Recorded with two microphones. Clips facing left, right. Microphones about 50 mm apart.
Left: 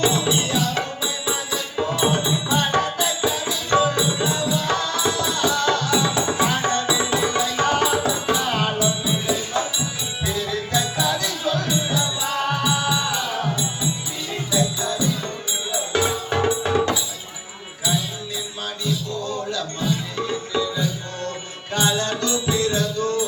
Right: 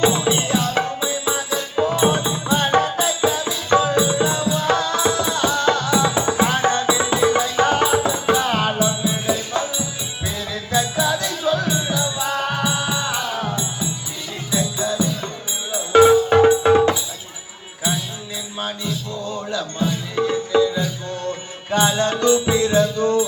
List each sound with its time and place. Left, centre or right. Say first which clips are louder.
0.0 s music: right 3 dB; right
2.7 s music: right 3 dB; centre
10.8 s music: right 4 dB; centre
14.5 s music: right 1 dB; centre
16.0 s music: right 9 dB; right
19.2 s music: right 1 dB; centre